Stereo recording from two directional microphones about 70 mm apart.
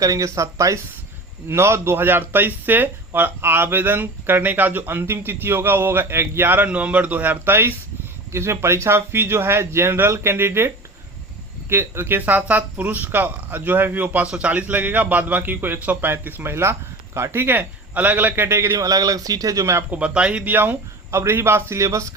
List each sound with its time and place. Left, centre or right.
0.0 s speech: right
6.7 s speech: centre; by 10.7 s right
11.7 s speech: right
14.3 s speech: centre; by 18.9 s right
18.9 s speech: right
19.9 s speech: centre
21.1 s speech: right